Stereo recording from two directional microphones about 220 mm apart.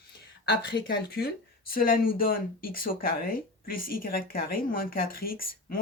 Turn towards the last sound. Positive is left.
turn(degrees=40)  # may be behind; listen again after turning